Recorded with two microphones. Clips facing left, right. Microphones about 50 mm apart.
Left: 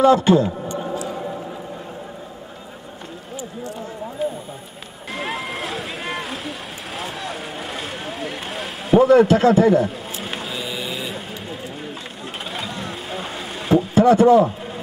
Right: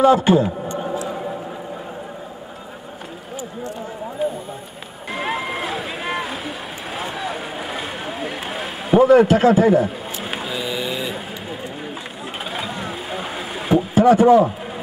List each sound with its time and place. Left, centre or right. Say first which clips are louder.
0.0 s a man's voice: even; centre
0.7 s a sound: right 1 dB; centre
4.2 s a sound: right 2 dB; centre
5.1 s vehicle: right 3 dB; centre
9.0 s a man's voice: right 1 dB; centre
9.8 s printer: right 1 dB; centre
12.5 s vehicle: right 2 dB; centre
13.9 s speech: right 1 dB; centre